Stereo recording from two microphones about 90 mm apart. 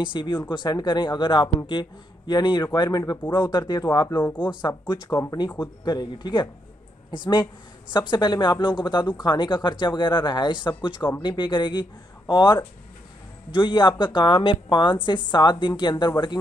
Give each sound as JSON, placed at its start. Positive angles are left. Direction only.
{"t": 0.0, "sound": "speech", "side_deg": 65}
{"t": 0.5, "sound": "speech", "side_deg": 50}
{"t": 4.1, "sound": "speech", "side_deg": 20}
{"t": 4.6, "sound": "speech", "side_deg": 55}
{"t": 5.1, "sound": "speech", "side_deg": 30}
{"t": 5.9, "sound": "speech", "side_deg": 55}
{"t": 7.9, "sound": "speech", "side_deg": 60}